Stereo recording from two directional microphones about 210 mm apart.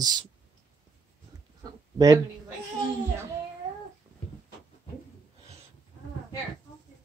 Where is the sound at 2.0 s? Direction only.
15° right (ahead or behind).